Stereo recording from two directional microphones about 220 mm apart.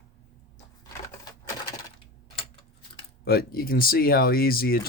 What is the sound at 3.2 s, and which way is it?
Speech, 45° left (ahead or behind).